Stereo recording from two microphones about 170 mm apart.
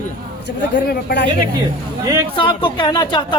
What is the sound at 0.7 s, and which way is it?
Speech, 90° left.